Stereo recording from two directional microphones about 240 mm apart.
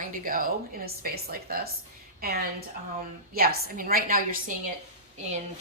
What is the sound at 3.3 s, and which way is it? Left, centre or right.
A woman's voice, right.